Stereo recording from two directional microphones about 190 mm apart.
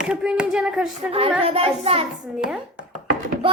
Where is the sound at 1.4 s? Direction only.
30° right (ahead or behind).